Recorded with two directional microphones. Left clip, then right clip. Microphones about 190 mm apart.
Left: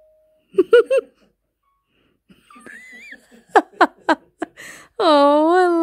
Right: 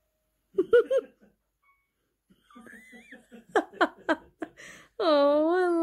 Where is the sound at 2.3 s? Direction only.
30° left (ahead or behind).